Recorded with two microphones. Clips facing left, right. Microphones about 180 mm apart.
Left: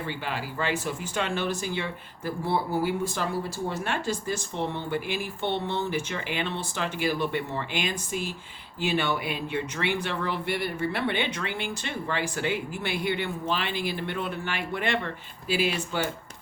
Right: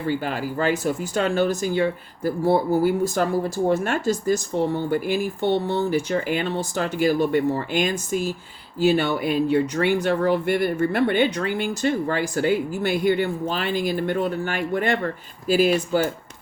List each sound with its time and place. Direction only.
0.1 s speech: 45° right (ahead or behind)